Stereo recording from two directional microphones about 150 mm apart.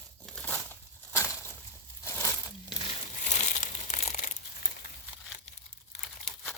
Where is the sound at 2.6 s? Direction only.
35° left (ahead or behind); by 4.3 s 50° left (ahead or behind).